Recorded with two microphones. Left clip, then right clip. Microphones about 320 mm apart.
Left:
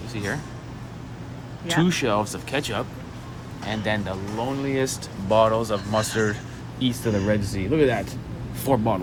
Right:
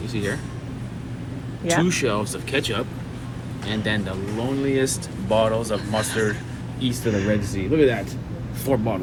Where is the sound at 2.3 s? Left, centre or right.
Centre.